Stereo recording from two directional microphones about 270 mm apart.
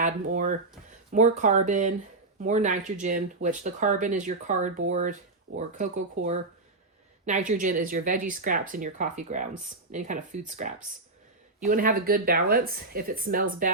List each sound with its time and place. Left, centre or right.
0.0 s speech: right